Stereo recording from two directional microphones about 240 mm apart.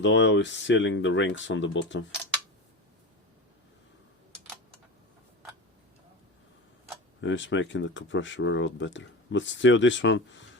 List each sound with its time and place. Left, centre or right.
0.0 s speech: left
7.2 s speech: left